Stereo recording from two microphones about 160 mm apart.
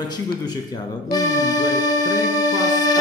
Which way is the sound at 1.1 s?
25° left (ahead or behind).